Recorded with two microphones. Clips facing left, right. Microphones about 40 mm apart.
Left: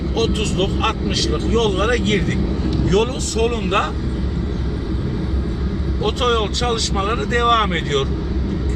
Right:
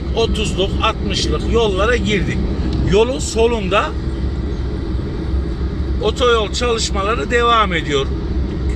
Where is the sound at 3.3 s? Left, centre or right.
Centre.